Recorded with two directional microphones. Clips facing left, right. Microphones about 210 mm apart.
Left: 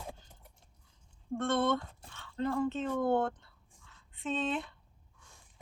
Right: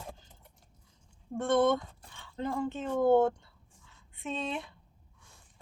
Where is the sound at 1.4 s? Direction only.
15° right (ahead or behind).